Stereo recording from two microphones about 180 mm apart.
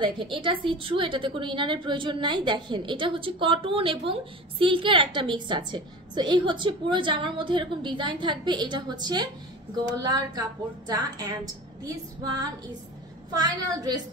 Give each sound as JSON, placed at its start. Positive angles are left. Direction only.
{"t": 0.0, "sound": "a woman's voice", "side_deg": -30}